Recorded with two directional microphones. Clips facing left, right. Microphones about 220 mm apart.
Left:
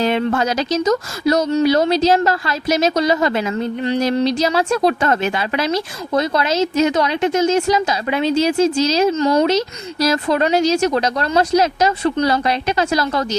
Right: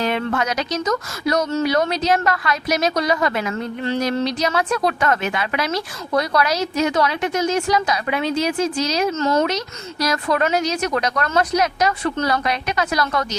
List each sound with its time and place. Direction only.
0.0 s a woman's voice: 25° left (ahead or behind)
4.2 s a woman's voice: 30° left (ahead or behind)
9.1 s speech: 15° left (ahead or behind)
9.5 s a woman's voice: 25° left (ahead or behind)